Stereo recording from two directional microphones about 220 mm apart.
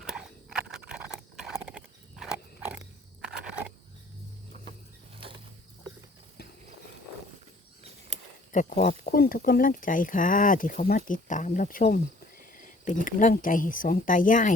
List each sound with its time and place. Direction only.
0.0 s horse: 5° right (ahead or behind)
5.1 s a sound: 25° right (ahead or behind)
8.5 s speech: 35° left (ahead or behind)
12.4 s cricket: 35° left (ahead or behind)
13.1 s speech: 35° left (ahead or behind)